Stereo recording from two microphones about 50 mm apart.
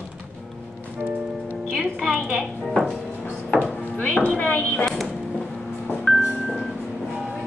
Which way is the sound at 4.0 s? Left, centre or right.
Left.